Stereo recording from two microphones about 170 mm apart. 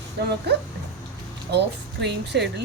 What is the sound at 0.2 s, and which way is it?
A woman's voice, 80° right.